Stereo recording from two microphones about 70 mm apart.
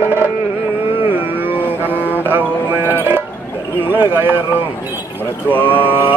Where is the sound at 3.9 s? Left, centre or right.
Right.